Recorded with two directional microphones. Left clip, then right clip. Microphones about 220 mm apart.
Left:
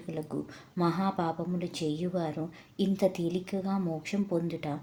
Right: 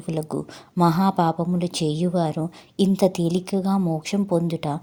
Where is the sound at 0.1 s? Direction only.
40° right (ahead or behind).